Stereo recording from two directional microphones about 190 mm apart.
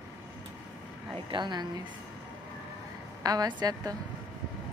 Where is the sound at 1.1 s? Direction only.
25° right (ahead or behind).